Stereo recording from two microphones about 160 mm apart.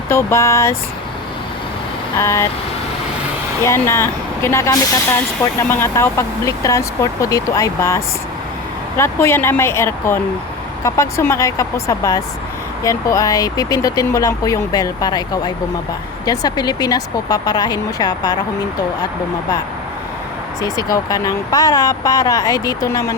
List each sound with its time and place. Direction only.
0.1 s speech: 15° left (ahead or behind)
2.1 s speech: 20° left (ahead or behind)
3.6 s speech: 15° left (ahead or behind)
20.9 s speech: 20° left (ahead or behind)